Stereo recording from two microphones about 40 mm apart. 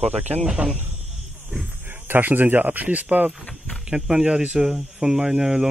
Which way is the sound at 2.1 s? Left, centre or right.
Right.